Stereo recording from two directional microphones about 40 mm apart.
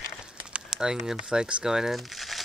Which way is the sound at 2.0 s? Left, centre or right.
Centre.